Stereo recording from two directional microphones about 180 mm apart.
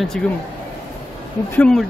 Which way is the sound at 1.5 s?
5° left (ahead or behind).